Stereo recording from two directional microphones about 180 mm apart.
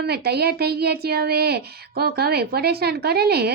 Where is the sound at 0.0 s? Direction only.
60° right (ahead or behind).